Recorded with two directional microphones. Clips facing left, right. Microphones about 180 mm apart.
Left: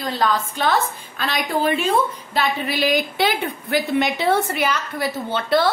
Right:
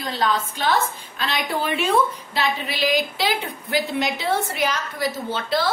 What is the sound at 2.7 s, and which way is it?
A woman's voice, 55° left (ahead or behind).